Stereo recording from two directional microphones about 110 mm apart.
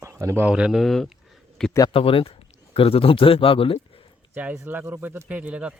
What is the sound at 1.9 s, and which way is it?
Speech, 55° left (ahead or behind).